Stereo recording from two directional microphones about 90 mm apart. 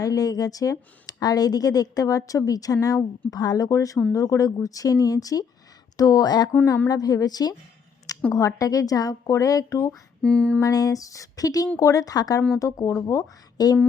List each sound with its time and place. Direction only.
0.0 s a woman's voice: 45° left (ahead or behind)
10.2 s a sound: 15° left (ahead or behind)
10.6 s a woman's voice: 40° left (ahead or behind)
13.6 s speech: 45° left (ahead or behind)